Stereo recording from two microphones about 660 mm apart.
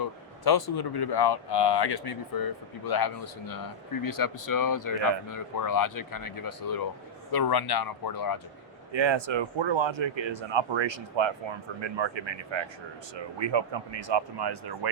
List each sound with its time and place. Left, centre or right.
0.0 s speech: left
8.9 s speech: right